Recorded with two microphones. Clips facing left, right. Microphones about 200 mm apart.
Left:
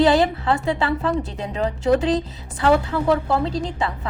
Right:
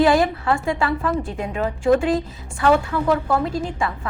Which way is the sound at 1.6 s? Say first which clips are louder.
Right 1 dB; 35° left (ahead or behind).